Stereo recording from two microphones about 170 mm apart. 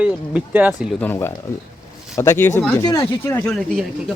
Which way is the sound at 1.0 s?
10° left (ahead or behind).